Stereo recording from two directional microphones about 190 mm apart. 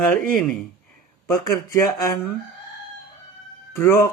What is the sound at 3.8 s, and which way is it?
Speech, 15° left (ahead or behind).